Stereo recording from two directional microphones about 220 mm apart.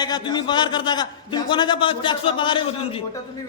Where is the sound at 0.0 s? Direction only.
20° left (ahead or behind).